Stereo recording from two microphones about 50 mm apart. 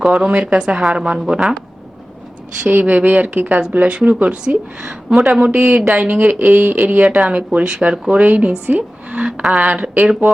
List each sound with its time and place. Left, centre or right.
0.0 s a woman's voice: centre
0.3 s a woman's voice: right
2.6 s speech: right
4.8 s a woman's voice: centre; by 9.2 s right
9.2 s a woman's voice: centre
9.6 s speech: right